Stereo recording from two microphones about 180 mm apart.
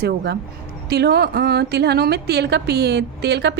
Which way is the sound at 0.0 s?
65° right (ahead or behind).